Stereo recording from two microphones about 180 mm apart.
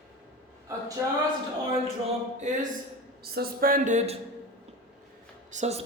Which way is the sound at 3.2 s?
60° right (ahead or behind).